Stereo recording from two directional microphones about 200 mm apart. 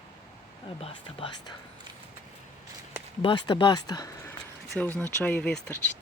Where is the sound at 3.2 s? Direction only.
25° left (ahead or behind).